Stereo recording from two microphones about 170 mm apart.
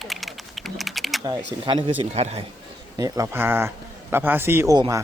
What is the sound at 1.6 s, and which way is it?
Speech, 30° right (ahead or behind).